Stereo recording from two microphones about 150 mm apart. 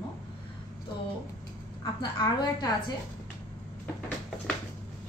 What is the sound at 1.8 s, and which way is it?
Speech, 30° left (ahead or behind).